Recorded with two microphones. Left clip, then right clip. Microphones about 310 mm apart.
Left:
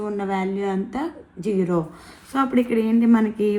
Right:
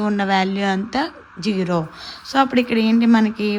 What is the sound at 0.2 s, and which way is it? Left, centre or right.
Speech, right.